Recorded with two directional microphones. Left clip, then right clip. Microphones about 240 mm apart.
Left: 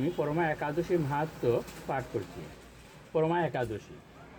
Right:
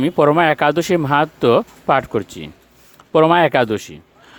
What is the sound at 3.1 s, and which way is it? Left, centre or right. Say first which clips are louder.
Speech: right 17 dB; right.